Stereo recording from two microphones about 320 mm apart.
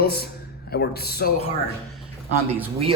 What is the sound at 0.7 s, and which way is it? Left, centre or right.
Speech, left.